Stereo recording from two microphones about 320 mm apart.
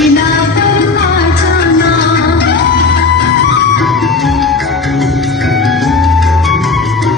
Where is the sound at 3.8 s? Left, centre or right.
Centre.